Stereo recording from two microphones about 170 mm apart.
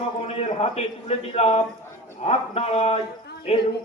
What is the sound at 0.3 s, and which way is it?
A man's voice, 40° left (ahead or behind).